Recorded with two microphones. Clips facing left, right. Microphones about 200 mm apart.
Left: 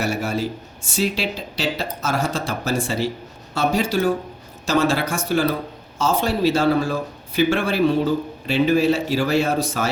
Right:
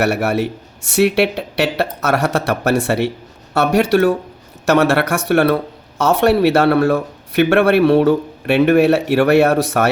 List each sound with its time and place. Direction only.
0.0 s speech: 70° right (ahead or behind)